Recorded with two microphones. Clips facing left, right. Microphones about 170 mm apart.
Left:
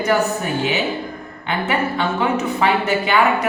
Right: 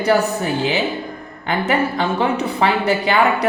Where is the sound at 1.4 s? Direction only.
40° right (ahead or behind).